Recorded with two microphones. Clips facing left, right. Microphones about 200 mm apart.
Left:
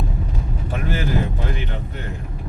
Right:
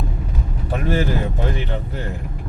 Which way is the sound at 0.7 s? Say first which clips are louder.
Right 6 dB; 35° right (ahead or behind).